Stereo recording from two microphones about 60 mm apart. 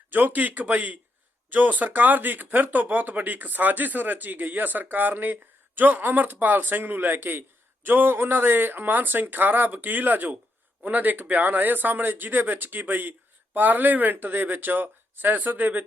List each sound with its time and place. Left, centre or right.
0.1 s speech: right